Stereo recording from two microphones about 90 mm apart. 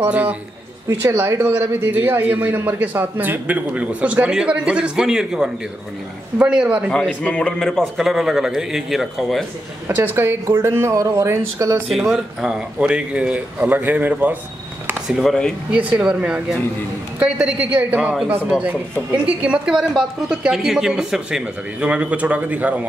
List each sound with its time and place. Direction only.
0.1 s a man's voice: 15° right (ahead or behind)
0.8 s a man's voice: 30° right (ahead or behind); by 6.9 s 15° right (ahead or behind)
7.2 s a man's voice: 10° left (ahead or behind)
9.8 s speech: 25° right (ahead or behind)
11.9 s a man's voice: centre (ahead or behind); by 14.4 s 20° right (ahead or behind)
15.0 s a man's voice: centre (ahead or behind)
15.7 s a man's voice: 15° right (ahead or behind)